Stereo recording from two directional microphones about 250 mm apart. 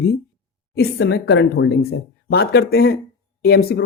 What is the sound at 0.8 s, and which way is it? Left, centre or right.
Speech, left.